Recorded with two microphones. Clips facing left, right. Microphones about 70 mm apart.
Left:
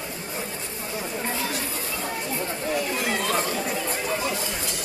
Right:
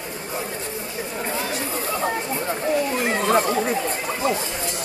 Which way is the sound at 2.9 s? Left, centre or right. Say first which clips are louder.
Right 5 dB; right.